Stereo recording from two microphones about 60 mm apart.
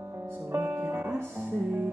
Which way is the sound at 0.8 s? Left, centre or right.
Right.